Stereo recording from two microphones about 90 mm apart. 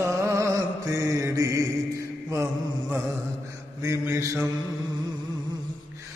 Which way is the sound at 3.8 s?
35° right (ahead or behind).